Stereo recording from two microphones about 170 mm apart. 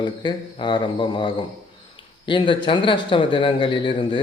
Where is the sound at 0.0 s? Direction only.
25° left (ahead or behind).